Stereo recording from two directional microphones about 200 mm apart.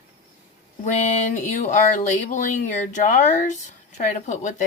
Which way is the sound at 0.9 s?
40° left (ahead or behind).